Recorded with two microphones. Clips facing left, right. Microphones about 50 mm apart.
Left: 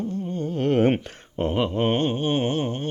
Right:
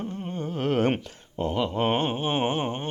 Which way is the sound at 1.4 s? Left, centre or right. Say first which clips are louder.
Left 3 dB; left.